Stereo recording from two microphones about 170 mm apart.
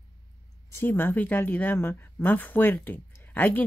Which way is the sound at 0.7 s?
15° left (ahead or behind).